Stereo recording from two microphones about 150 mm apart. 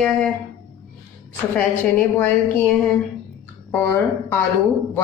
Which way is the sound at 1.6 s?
10° left (ahead or behind).